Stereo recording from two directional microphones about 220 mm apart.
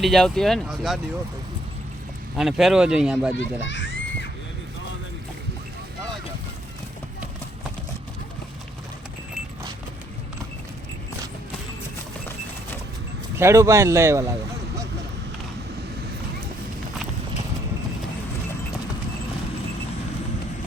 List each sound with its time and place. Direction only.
0.0 s speech: centre (ahead or behind)
2.3 s speech: centre (ahead or behind)
3.3 s children playing: 55° left (ahead or behind)
13.3 s speech: 10° right (ahead or behind)